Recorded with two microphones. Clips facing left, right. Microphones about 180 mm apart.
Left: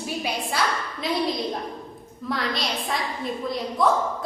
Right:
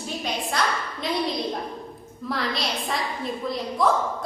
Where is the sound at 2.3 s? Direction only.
Centre (ahead or behind).